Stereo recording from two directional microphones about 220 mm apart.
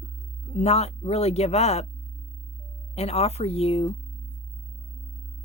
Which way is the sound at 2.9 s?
30° left (ahead or behind).